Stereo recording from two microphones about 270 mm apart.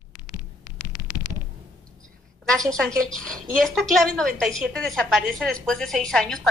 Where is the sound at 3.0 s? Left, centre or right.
Centre.